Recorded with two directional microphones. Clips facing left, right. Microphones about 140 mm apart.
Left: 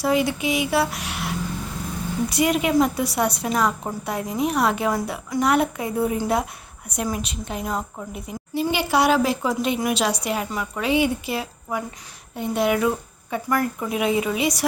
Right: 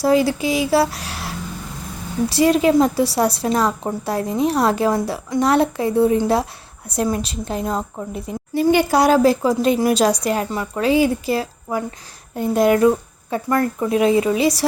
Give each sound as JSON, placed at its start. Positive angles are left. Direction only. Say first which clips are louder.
{"t": 0.0, "sound": "a woman's voice", "louder": "right 5 dB", "side_deg": -35}
{"t": 2.3, "sound": "a woman's voice", "louder": "right 6 dB", "side_deg": -30}
{"t": 8.5, "sound": "a woman's voice", "louder": "right 6 dB", "side_deg": -50}
{"t": 13.3, "sound": "a woman's voice", "louder": "right 4 dB", "side_deg": -25}